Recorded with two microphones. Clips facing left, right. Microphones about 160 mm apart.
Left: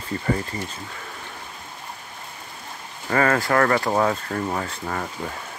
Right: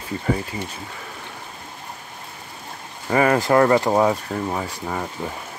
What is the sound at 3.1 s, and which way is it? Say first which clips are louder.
Speech: right 3 dB; 15° right (ahead or behind).